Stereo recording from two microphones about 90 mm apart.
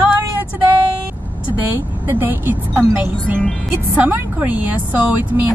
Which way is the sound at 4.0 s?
20° right (ahead or behind).